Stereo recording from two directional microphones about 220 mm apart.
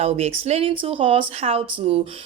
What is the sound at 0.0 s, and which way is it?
Speech, 30° right (ahead or behind).